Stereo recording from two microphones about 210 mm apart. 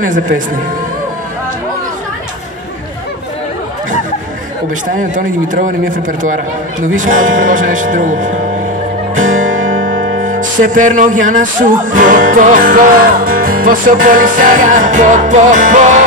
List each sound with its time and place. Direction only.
4.9 s music: 40° right (ahead or behind)
7.0 s music: 40° right (ahead or behind)
9.8 s music: 65° right (ahead or behind)
10.2 s music: 40° right (ahead or behind)